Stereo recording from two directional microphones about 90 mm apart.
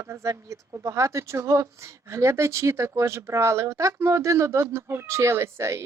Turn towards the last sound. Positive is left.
turn(degrees=-30)  # may be behind; listen again after turning